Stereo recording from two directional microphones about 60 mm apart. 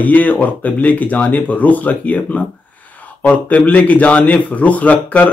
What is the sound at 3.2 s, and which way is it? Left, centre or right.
A man's voice, left.